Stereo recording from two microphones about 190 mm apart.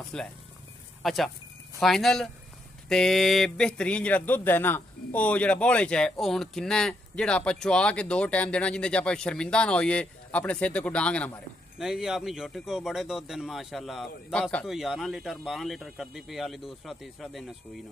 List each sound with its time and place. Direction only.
0.1 s speech: 5° left (ahead or behind)